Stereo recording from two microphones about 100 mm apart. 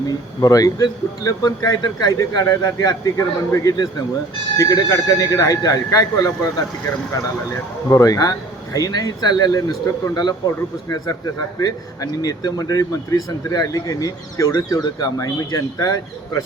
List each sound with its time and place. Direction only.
0.4 s speech: 35° left (ahead or behind)
7.9 s speech: 35° left (ahead or behind)